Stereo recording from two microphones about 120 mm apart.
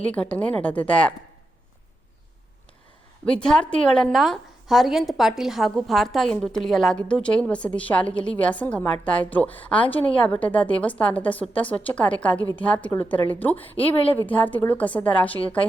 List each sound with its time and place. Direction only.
0.0 s a woman's voice: 10° left (ahead or behind)
3.2 s a woman's voice: 5° left (ahead or behind)
13.9 s speech: 50° left (ahead or behind)
14.2 s a woman's voice: 15° left (ahead or behind)